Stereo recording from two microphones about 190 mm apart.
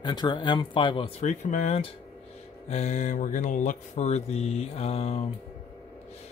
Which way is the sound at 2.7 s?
35° left (ahead or behind).